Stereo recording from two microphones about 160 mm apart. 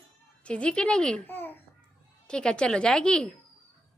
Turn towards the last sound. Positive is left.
turn(degrees=5)  # may be behind; listen again after turning